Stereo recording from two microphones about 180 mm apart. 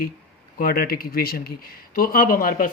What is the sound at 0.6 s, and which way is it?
Speech, 55° left (ahead or behind).